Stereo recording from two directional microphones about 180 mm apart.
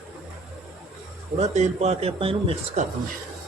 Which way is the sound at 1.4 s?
40° right (ahead or behind).